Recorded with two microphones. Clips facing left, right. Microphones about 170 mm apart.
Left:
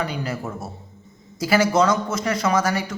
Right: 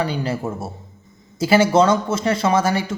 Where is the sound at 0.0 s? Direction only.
30° right (ahead or behind).